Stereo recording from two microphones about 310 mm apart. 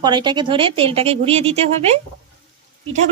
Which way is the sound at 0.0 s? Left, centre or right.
Centre.